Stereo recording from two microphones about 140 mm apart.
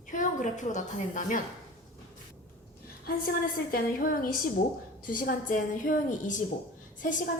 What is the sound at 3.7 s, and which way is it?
Speech, 90° left.